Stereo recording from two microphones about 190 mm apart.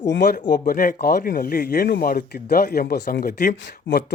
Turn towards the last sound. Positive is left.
turn(degrees=60)  # may be behind; listen again after turning